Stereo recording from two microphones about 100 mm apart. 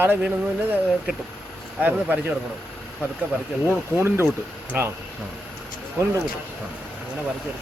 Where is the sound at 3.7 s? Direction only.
25° right (ahead or behind).